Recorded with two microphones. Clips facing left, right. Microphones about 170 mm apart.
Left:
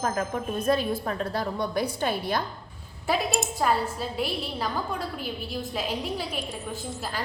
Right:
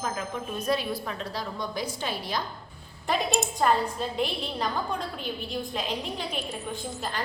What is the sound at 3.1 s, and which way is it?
A woman's voice, centre (ahead or behind).